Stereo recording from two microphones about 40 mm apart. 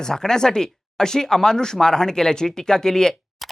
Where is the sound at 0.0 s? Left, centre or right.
Centre.